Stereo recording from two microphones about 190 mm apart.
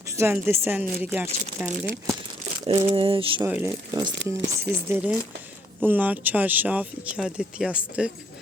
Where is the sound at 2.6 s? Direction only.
30° right (ahead or behind).